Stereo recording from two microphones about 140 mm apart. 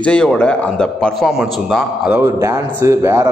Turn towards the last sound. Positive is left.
turn(degrees=-20)  # may be behind; listen again after turning